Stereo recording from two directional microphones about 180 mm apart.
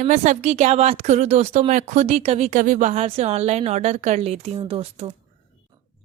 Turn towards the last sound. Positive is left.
turn(degrees=-30)  # may be behind; listen again after turning